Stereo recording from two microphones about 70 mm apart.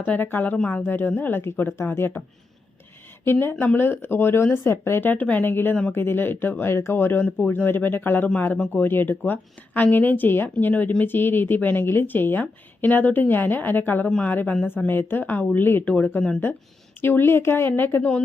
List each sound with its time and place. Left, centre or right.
0.0 s speech: left
3.3 s speech: left
14.1 s speech: centre
14.8 s speech: left